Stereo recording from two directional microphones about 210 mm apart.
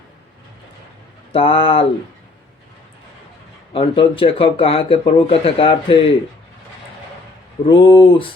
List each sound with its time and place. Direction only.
1.3 s speech: 25° left (ahead or behind)
3.7 s speech: 25° left (ahead or behind)
7.7 s speech: 25° left (ahead or behind)